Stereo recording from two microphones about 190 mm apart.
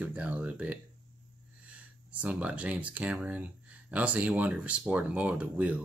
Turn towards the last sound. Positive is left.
turn(degrees=-10)  # may be behind; listen again after turning